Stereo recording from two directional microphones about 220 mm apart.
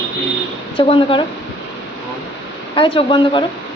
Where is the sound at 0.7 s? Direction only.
25° left (ahead or behind).